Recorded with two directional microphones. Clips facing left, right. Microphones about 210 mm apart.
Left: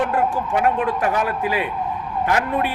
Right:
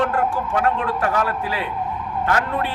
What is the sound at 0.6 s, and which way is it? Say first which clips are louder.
Speech: left 2 dB; 15° left (ahead or behind).